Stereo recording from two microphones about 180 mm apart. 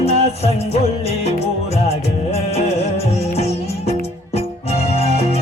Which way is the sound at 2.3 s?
35° left (ahead or behind).